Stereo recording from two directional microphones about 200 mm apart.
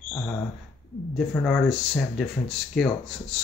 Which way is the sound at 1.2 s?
Centre (ahead or behind).